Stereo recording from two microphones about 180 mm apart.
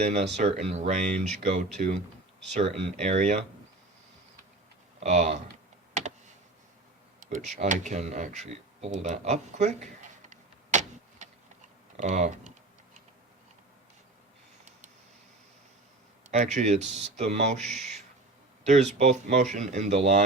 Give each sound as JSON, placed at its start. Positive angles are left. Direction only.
{"t": 0.0, "sound": "speech", "side_deg": -40}
{"t": 4.9, "sound": "speech", "side_deg": -40}
{"t": 5.9, "sound": "computer keyboard", "side_deg": -40}
{"t": 7.2, "sound": "a sound", "side_deg": -45}
{"t": 11.9, "sound": "speech", "side_deg": -40}
{"t": 16.3, "sound": "speech", "side_deg": -40}